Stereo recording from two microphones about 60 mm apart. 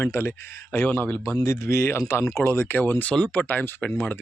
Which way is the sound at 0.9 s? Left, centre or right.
Left.